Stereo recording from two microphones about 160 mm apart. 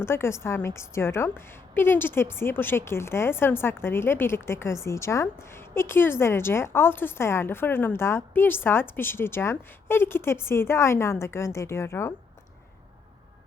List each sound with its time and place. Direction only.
0.0 s a woman's voice: 15° left (ahead or behind)